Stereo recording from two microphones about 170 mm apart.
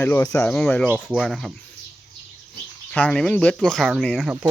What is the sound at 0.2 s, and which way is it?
Speech, 20° left (ahead or behind).